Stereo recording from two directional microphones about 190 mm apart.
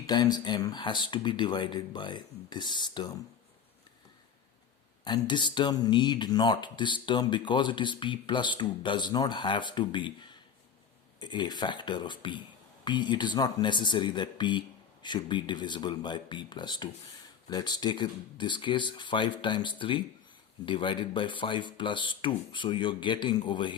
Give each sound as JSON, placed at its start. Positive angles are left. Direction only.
{"t": 0.0, "sound": "speech", "side_deg": 20}
{"t": 5.0, "sound": "speech", "side_deg": 25}